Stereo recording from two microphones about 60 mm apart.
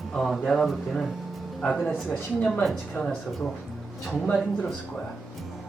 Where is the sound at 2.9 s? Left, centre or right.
Centre.